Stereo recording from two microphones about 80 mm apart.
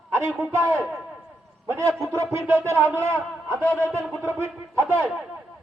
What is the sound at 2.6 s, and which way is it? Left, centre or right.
A man's voice, right.